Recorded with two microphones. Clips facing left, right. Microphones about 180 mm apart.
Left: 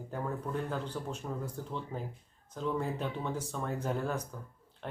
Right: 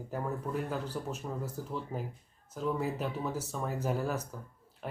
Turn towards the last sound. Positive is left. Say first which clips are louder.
# right 1 dB
turn(degrees=-5)  # may be behind; listen again after turning